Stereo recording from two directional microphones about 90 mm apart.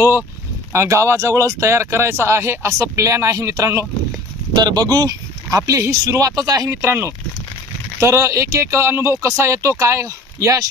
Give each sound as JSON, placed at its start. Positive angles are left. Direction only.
{"t": 0.7, "sound": "speech", "side_deg": -35}
{"t": 4.6, "sound": "speech", "side_deg": -50}
{"t": 5.6, "sound": "speech", "side_deg": -35}
{"t": 6.7, "sound": "speech", "side_deg": -30}